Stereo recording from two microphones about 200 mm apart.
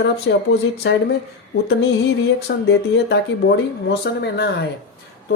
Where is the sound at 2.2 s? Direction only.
55° left (ahead or behind).